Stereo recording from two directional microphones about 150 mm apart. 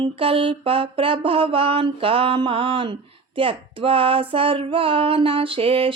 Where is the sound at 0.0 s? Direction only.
40° right (ahead or behind).